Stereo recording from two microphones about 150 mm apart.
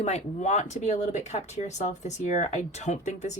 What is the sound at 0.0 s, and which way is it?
Speech, 50° left (ahead or behind).